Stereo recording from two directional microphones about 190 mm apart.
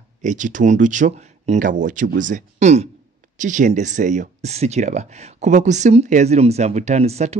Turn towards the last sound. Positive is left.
turn(degrees=-35)  # may be behind; listen again after turning